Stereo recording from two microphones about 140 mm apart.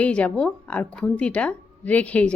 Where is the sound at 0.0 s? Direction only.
10° left (ahead or behind).